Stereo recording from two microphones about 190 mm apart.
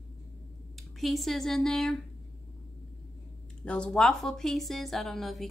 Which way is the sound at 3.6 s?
5° left (ahead or behind).